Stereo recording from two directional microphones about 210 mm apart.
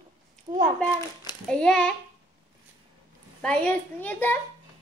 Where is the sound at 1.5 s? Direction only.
5° left (ahead or behind).